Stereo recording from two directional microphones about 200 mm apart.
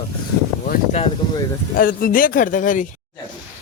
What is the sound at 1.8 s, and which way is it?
Speech, 45° left (ahead or behind).